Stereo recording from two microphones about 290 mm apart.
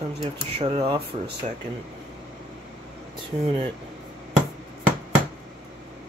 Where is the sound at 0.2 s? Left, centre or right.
Centre.